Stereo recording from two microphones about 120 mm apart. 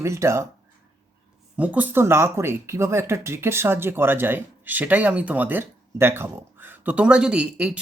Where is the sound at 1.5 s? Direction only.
15° right (ahead or behind).